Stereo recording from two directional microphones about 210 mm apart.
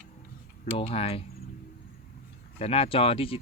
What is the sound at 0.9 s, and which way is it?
Speech, 25° left (ahead or behind).